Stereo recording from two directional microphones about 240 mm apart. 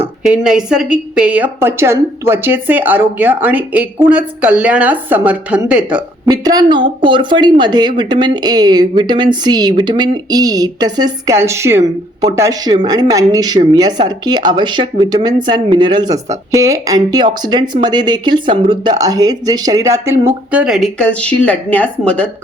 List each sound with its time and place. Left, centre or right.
0.3 s a woman's voice: centre
6.2 s speech: centre